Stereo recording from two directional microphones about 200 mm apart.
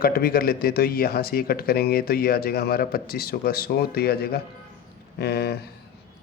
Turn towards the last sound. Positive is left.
turn(degrees=55)  # may be behind; listen again after turning